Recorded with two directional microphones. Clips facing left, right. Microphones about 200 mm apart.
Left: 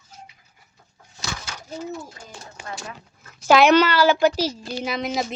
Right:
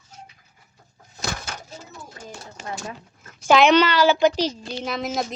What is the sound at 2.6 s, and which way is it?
Speech, 40° right (ahead or behind).